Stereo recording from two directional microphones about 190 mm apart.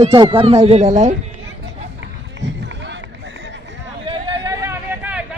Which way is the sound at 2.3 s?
70° right (ahead or behind).